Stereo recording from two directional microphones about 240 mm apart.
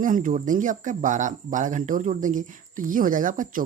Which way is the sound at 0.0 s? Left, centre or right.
Right.